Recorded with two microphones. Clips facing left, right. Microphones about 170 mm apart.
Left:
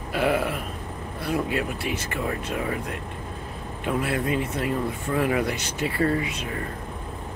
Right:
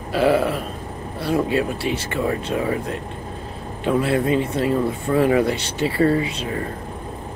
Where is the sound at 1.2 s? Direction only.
30° right (ahead or behind).